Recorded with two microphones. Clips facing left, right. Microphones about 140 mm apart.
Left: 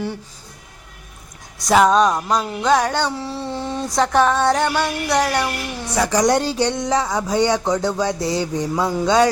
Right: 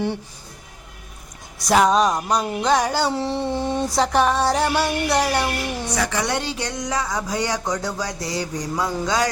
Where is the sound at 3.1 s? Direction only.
25° right (ahead or behind).